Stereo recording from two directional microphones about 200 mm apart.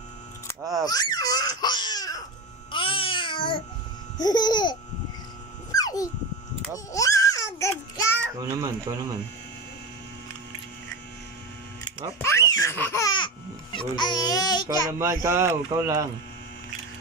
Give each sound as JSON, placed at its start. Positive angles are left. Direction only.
{"t": 0.8, "sound": "crying", "side_deg": 20}
{"t": 2.7, "sound": "babbling", "side_deg": 25}
{"t": 5.7, "sound": "dog", "side_deg": 20}
{"t": 6.7, "sound": "a sound", "side_deg": 15}
{"t": 8.2, "sound": "speech", "side_deg": -15}
{"t": 12.2, "sound": "speech", "side_deg": 10}
{"t": 14.7, "sound": "a child's voice", "side_deg": -15}